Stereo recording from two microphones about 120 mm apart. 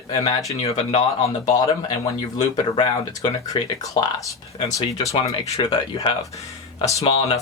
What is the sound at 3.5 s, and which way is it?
Speech, 30° left (ahead or behind).